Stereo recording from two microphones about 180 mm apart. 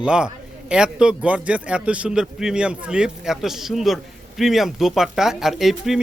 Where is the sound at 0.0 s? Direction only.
5° right (ahead or behind).